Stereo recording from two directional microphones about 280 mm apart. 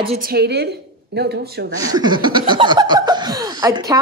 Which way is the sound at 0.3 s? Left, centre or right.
Right.